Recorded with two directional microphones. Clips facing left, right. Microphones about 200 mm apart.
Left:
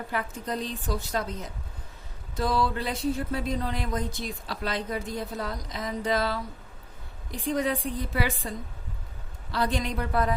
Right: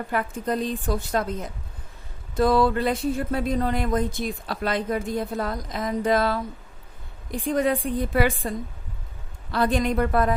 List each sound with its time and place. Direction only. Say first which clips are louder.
0.1 s speech: right 6 dB; 55° right (ahead or behind)